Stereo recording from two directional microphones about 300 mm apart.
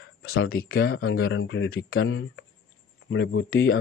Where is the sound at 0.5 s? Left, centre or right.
Left.